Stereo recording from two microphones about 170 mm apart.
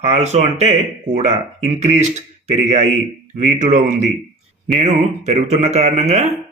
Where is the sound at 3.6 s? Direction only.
45° right (ahead or behind).